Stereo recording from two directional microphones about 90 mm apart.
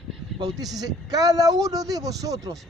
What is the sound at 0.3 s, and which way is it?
Speech, 50° right (ahead or behind).